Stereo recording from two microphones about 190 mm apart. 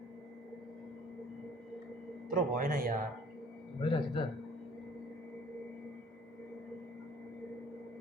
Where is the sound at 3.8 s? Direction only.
25° left (ahead or behind).